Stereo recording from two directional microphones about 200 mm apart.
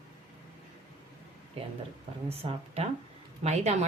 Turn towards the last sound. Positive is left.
turn(degrees=-35)  # may be behind; listen again after turning